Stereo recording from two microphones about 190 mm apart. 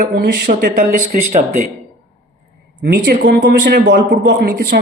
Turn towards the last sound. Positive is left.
turn(degrees=-60)  # may be behind; listen again after turning